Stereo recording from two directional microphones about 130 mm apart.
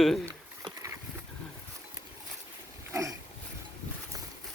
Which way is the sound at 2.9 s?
25° right (ahead or behind).